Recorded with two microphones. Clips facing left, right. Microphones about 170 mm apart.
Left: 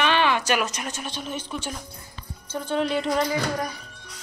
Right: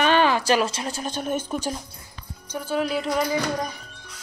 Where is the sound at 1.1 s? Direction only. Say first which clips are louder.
Right 5 dB; 50° right (ahead or behind).